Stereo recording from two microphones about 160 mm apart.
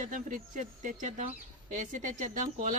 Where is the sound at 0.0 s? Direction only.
55° right (ahead or behind).